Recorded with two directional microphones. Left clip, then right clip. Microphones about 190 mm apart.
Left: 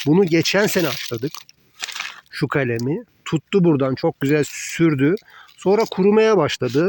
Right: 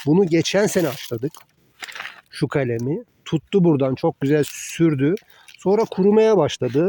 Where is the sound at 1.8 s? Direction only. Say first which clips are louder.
Left 4 dB; 35° right (ahead or behind).